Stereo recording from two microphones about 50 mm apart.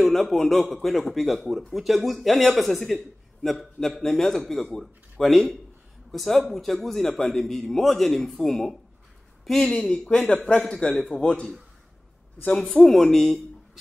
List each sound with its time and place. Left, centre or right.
0.0 s a man's voice: centre
12.4 s a man's voice: centre